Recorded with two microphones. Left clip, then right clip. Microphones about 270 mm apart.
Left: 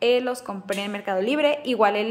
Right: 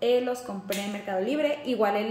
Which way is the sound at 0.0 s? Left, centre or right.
Centre.